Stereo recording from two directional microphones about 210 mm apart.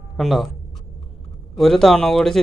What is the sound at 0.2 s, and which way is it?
Speech, centre (ahead or behind).